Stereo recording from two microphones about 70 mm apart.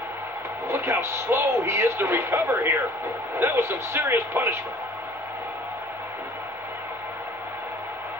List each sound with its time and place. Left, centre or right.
0.7 s a man's voice: right